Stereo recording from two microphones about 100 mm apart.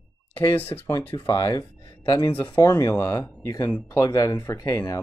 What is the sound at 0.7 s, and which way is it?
Speech, 30° left (ahead or behind).